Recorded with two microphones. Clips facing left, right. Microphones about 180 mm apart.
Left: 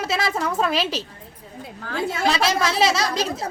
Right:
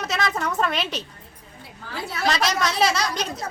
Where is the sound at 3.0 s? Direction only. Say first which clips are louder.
Left 3 dB; 30° left (ahead or behind).